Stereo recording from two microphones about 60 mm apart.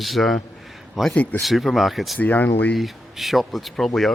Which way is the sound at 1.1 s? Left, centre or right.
Left.